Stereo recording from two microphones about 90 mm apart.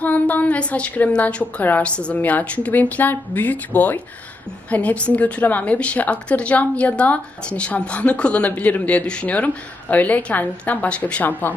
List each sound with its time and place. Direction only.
0.0 s a woman's voice: 20° left (ahead or behind)